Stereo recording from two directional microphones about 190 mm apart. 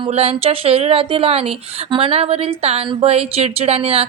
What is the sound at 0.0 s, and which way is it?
Speech, 30° right (ahead or behind).